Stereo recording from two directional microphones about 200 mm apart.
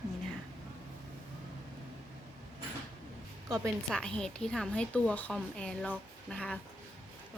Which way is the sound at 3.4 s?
Centre (ahead or behind).